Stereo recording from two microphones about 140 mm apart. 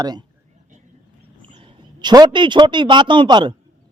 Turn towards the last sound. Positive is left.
turn(degrees=-35)  # may be behind; listen again after turning